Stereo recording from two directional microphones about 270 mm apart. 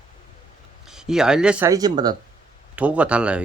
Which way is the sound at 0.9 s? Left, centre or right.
Centre.